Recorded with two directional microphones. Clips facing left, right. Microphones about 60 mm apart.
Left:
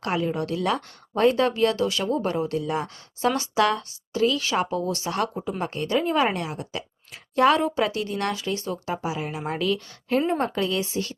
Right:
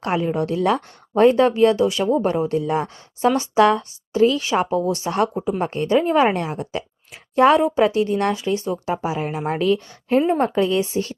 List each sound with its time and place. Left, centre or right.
0.0 s speech: right
10.2 s a woman's voice: centre
10.4 s speech: right